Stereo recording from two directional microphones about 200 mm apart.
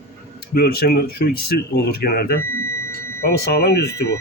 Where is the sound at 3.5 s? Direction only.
55° left (ahead or behind).